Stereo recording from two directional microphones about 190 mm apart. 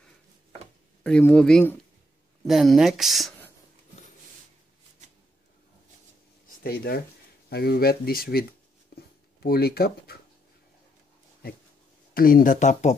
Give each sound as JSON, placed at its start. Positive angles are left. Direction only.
{"t": 1.0, "sound": "speech", "side_deg": 5}
{"t": 6.6, "sound": "speech", "side_deg": 55}
{"t": 8.9, "sound": "writing", "side_deg": 55}
{"t": 12.1, "sound": "speech", "side_deg": 50}